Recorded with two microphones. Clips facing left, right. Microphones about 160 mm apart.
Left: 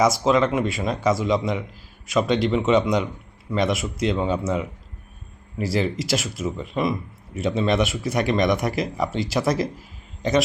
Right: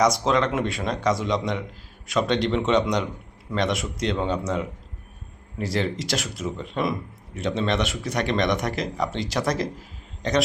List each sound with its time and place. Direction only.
0.0 s speech: 5° left (ahead or behind)